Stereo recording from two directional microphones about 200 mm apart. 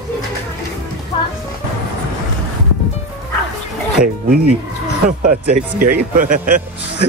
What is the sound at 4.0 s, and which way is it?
Speech, 45° right (ahead or behind).